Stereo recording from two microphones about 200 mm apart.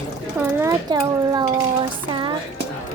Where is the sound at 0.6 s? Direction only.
15° right (ahead or behind).